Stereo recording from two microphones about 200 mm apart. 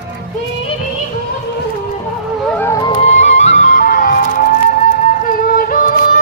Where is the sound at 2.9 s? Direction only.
35° left (ahead or behind).